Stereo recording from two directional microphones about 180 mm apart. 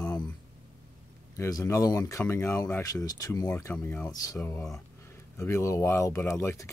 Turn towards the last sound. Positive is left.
turn(degrees=15)  # may be behind; listen again after turning